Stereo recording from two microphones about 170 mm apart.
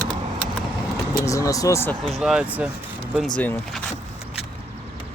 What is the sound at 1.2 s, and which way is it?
Speech, 20° left (ahead or behind).